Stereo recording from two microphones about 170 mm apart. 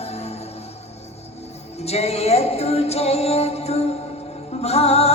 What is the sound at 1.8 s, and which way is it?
Music, 40° left (ahead or behind).